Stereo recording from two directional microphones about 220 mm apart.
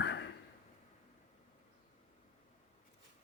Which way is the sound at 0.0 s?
55° left (ahead or behind).